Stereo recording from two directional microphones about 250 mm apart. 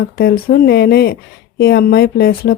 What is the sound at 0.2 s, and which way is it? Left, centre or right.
A woman's voice, left.